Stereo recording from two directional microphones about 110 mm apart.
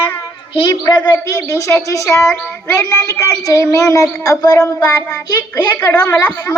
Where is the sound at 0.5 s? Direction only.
45° left (ahead or behind).